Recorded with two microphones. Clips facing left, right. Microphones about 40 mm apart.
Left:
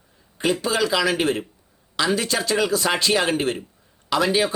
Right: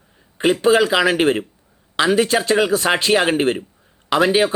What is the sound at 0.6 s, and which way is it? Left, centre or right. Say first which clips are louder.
Speech: right 8 dB; right.